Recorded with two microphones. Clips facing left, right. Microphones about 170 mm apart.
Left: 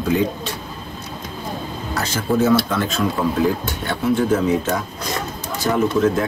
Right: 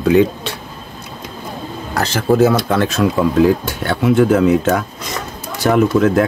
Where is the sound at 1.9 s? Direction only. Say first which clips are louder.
Right 5 dB; 70° right (ahead or behind).